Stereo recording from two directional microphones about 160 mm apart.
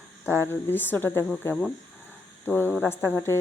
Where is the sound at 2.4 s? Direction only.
15° left (ahead or behind).